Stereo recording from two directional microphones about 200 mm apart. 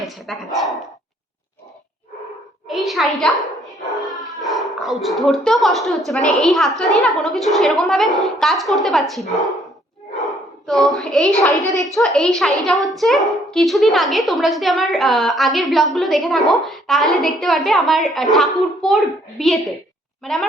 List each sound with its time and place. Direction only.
0.0 s speech: centre (ahead or behind)
2.6 s a sound: centre (ahead or behind)
4.4 s a woman's voice: centre (ahead or behind)
10.7 s a woman's voice: centre (ahead or behind)
11.6 s a child's voice: 15° right (ahead or behind)
11.9 s a woman's voice: centre (ahead or behind)